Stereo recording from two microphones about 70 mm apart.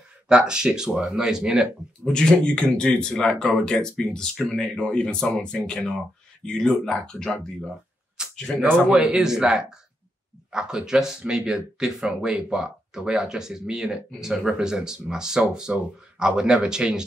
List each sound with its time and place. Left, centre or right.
0.3 s speech: centre
2.1 s speech: centre
8.9 s speech: centre